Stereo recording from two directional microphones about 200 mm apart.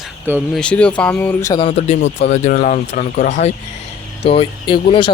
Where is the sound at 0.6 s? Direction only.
5° left (ahead or behind).